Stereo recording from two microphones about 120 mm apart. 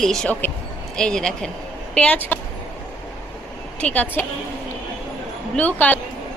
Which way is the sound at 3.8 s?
15° left (ahead or behind).